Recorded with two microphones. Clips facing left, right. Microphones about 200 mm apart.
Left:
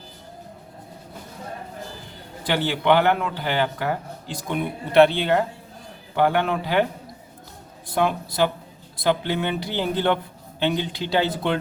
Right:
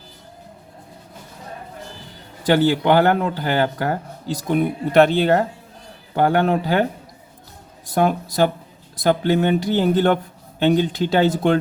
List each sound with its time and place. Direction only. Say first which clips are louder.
2.4 s speech: right 7 dB; 45° right (ahead or behind)
7.9 s speech: right 4 dB; 45° right (ahead or behind)